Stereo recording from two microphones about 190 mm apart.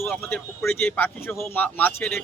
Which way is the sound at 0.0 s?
5° left (ahead or behind).